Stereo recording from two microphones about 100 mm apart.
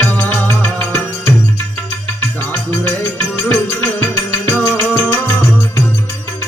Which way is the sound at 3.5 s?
15° left (ahead or behind).